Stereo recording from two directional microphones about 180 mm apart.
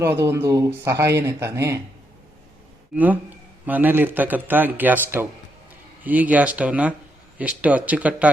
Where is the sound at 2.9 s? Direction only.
10° right (ahead or behind).